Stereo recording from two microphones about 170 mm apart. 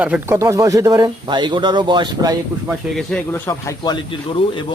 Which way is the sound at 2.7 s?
Centre (ahead or behind).